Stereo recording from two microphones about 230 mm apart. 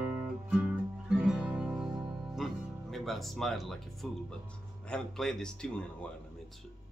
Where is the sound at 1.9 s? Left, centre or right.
Centre.